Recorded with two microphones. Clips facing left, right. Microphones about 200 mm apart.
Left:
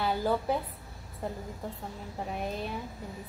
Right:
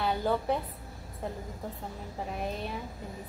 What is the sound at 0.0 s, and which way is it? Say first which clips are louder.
A woman's voice: even; centre (ahead or behind).